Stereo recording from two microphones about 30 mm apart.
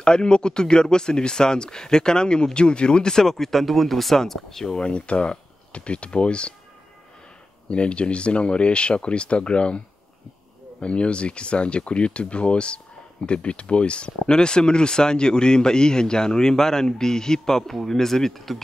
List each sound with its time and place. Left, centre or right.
0.0 s a man's voice: left
3.2 s speech: centre
4.7 s speech: left
7.7 s speech: left
10.8 s a man's voice: left; by 18.3 s centre
18.3 s speech: centre